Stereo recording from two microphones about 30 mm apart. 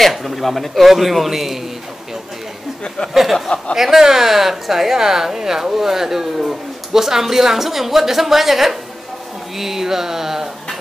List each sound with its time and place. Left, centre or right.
0.0 s a man's voice: centre
3.2 s a woman's voice: centre